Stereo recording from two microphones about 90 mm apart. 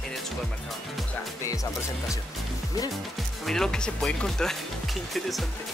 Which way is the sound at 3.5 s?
5° left (ahead or behind).